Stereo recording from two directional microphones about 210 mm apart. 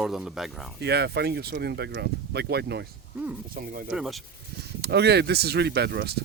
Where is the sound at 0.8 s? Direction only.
50° right (ahead or behind).